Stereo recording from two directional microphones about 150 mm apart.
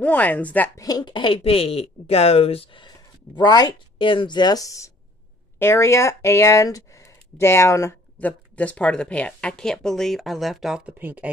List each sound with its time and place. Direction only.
0.0 s speech: 10° left (ahead or behind)
0.7 s speech: 25° left (ahead or behind); by 11.2 s 10° right (ahead or behind)